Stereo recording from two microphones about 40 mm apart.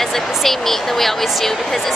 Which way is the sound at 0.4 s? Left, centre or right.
Centre.